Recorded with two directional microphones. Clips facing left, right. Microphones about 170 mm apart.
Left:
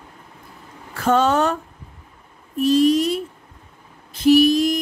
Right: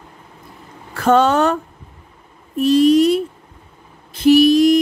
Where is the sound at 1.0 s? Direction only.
70° right (ahead or behind).